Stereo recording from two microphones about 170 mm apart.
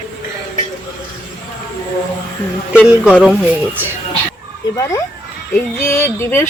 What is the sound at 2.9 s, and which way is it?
Speech, 5° right (ahead or behind).